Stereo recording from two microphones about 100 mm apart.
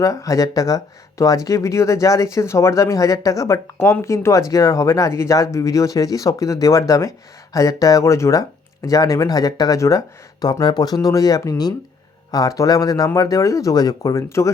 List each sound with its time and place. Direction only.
0.0 s speech: 35° left (ahead or behind)